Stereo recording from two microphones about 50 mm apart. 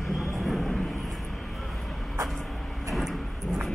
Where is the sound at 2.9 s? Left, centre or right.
Centre.